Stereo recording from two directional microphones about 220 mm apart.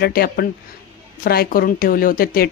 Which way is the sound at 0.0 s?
40° left (ahead or behind).